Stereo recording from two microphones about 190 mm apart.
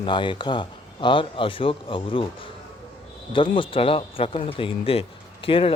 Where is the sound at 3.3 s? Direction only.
25° left (ahead or behind).